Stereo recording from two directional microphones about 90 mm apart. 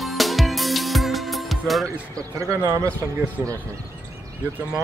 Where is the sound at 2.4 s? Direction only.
35° right (ahead or behind).